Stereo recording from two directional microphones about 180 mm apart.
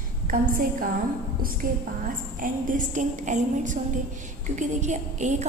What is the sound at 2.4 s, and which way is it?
A woman's voice, 50° right (ahead or behind).